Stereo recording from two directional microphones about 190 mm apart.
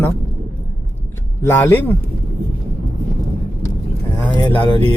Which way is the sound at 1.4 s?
10° left (ahead or behind).